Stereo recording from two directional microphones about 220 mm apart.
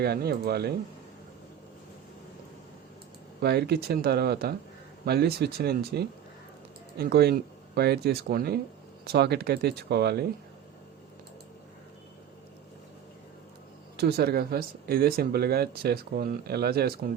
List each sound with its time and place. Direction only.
0.0 s speech: 45° right (ahead or behind)
3.4 s speech: 45° right (ahead or behind)
13.9 s speech: 45° right (ahead or behind)